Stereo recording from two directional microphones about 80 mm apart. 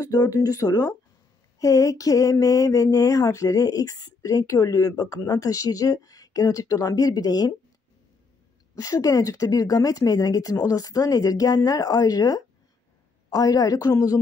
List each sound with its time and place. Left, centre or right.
0.0 s speech: left
8.7 s speech: left